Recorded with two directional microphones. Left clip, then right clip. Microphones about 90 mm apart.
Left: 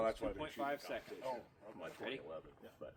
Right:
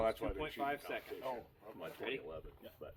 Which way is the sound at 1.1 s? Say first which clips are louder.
Right 1 dB; 10° left (ahead or behind).